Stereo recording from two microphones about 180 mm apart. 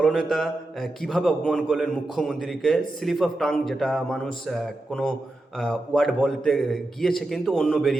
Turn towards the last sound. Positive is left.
turn(degrees=0)  # may be behind; listen again after turning